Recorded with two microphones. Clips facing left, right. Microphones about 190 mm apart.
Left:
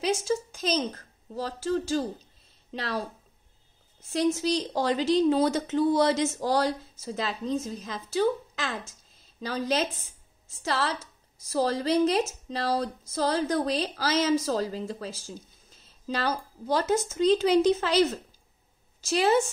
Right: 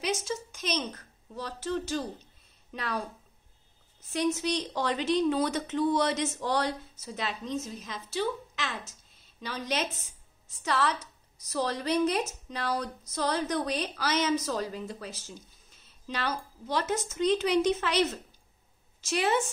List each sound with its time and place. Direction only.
0.0 s speech: 35° left (ahead or behind)
4.0 s a woman's voice: 30° left (ahead or behind)